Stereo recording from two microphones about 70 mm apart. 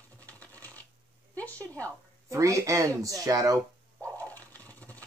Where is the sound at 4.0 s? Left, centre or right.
Left.